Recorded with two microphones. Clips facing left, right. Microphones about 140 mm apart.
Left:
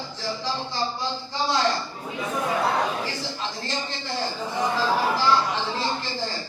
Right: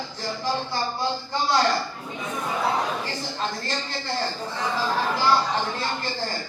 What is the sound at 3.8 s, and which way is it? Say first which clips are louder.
A man's voice: even; 20° left (ahead or behind).